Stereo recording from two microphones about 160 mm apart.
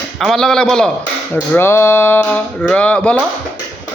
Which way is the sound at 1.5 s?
15° left (ahead or behind).